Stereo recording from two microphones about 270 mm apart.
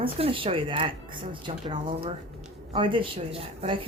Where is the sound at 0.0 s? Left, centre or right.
Centre.